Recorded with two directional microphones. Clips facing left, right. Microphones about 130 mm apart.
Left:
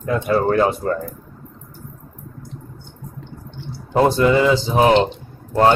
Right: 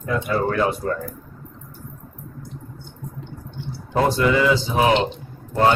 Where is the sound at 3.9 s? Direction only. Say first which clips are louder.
Left 4 dB; 25° left (ahead or behind).